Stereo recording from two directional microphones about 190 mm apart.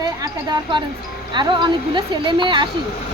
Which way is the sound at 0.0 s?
20° right (ahead or behind).